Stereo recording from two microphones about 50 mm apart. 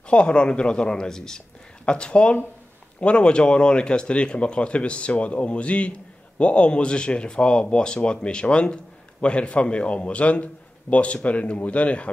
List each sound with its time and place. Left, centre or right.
0.1 s speech: left